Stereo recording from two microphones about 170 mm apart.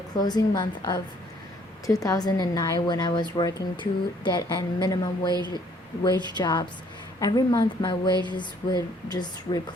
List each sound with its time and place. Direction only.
0.2 s speech: 25° left (ahead or behind)